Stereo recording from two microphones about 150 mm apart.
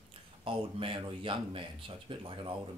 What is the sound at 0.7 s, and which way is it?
Speech, 35° right (ahead or behind).